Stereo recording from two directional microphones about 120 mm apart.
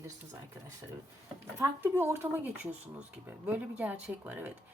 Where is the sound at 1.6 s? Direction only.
20° right (ahead or behind).